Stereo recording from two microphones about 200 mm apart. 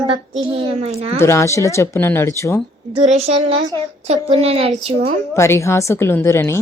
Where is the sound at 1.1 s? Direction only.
15° left (ahead or behind).